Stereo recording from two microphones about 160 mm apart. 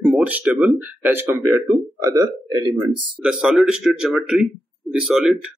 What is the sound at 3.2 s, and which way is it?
A man's voice, 5° right (ahead or behind).